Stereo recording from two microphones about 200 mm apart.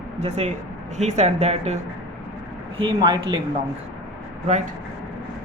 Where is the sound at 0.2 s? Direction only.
35° right (ahead or behind).